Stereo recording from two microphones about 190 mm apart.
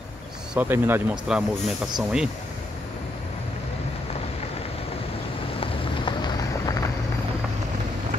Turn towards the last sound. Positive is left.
turn(degrees=20)  # may be behind; listen again after turning